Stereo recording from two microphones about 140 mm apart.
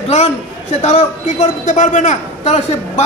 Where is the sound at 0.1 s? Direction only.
50° left (ahead or behind).